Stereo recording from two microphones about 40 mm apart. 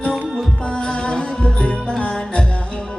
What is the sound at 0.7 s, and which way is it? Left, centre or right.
Music, left.